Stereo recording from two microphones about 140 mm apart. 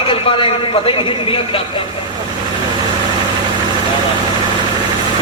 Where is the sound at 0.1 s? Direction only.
40° left (ahead or behind).